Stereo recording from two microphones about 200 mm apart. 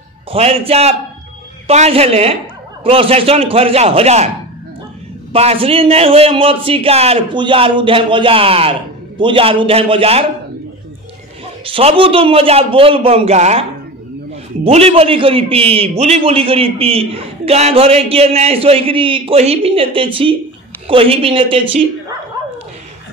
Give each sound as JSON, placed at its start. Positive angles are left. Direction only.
{"t": 0.3, "sound": "a man's voice", "side_deg": -30}
{"t": 5.3, "sound": "a man's voice", "side_deg": -30}
{"t": 11.6, "sound": "a man's voice", "side_deg": -25}